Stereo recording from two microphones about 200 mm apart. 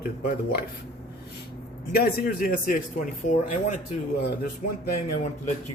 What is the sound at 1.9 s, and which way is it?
Speech, 45° left (ahead or behind).